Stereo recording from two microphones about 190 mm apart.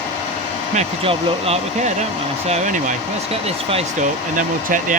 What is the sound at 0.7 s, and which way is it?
Speech, 30° right (ahead or behind).